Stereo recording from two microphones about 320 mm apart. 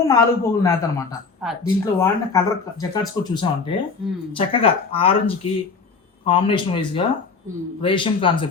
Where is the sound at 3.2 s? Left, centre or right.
Centre.